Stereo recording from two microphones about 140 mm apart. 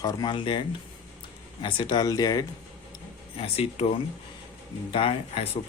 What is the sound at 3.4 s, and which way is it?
Speech, 45° left (ahead or behind).